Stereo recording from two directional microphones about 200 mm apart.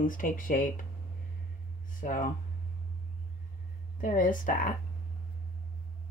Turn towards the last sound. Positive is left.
turn(degrees=40)  # may be behind; listen again after turning